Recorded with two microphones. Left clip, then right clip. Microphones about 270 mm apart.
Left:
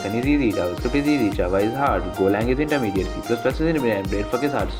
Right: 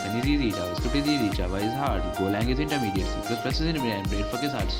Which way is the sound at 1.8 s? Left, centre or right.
Right.